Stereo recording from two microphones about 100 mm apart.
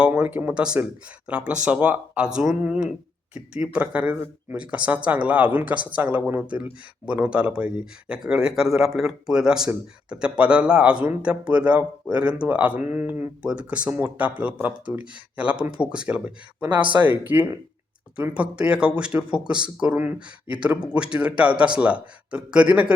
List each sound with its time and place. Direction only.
0.0 s speech: 15° right (ahead or behind)